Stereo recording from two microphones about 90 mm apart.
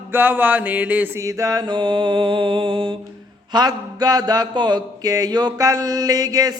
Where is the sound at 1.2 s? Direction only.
40° right (ahead or behind); by 2.9 s 75° right (ahead or behind).